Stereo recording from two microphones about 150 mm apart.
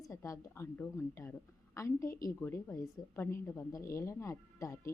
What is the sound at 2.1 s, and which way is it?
Speech, 70° left (ahead or behind).